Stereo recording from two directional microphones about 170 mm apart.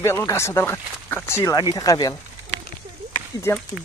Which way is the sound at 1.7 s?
20° left (ahead or behind).